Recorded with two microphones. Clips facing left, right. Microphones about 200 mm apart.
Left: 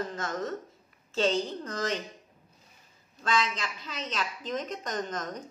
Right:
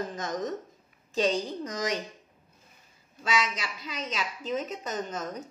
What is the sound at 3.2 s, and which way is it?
A woman's voice, 10° right (ahead or behind).